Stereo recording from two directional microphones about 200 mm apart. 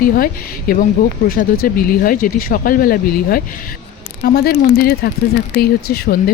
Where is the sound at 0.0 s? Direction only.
45° left (ahead or behind).